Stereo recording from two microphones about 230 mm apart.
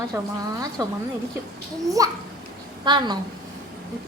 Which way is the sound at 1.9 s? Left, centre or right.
Centre.